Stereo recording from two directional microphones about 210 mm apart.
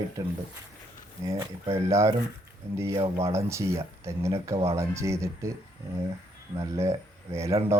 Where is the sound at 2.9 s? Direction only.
25° right (ahead or behind).